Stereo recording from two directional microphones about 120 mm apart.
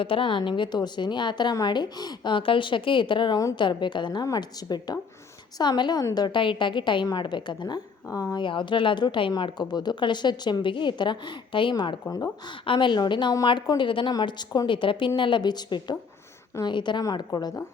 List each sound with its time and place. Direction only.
0.0 s a woman's voice: 45° left (ahead or behind)
8.0 s speech: 30° left (ahead or behind)
8.4 s a woman's voice: 45° left (ahead or behind)